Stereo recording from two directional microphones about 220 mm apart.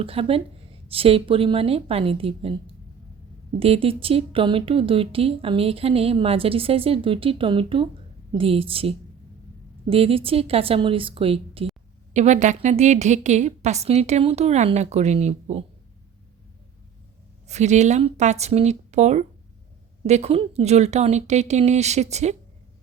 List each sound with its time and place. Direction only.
0.0 s speech: 25° right (ahead or behind)
3.6 s a woman's voice: 25° right (ahead or behind)
17.5 s a woman's voice: 30° right (ahead or behind)